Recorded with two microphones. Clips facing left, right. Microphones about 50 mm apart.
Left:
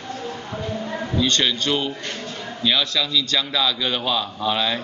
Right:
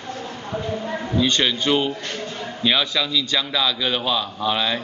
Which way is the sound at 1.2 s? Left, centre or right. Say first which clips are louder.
Right 1 dB; centre.